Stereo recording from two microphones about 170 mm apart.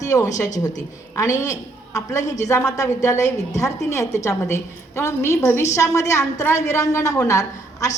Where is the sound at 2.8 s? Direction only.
20° left (ahead or behind).